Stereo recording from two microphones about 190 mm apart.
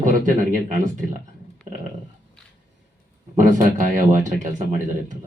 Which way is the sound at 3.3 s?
40° right (ahead or behind).